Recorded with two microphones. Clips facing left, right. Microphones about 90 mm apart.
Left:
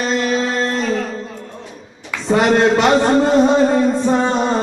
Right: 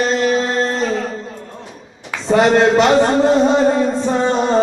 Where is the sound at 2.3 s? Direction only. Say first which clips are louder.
Right 2 dB; 20° right (ahead or behind).